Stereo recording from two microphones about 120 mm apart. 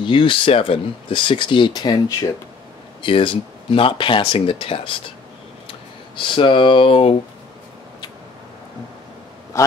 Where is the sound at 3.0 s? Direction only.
45° left (ahead or behind).